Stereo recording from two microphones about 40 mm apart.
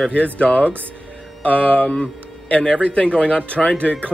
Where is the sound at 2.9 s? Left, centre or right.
Left.